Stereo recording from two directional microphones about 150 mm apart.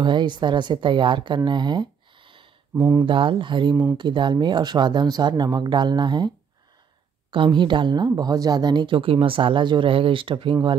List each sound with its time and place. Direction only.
0.0 s speech: 30° right (ahead or behind)
2.7 s speech: 15° right (ahead or behind)
3.1 s speech: 35° right (ahead or behind)